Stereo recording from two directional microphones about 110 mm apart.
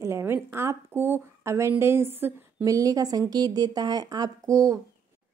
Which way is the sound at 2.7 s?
35° right (ahead or behind).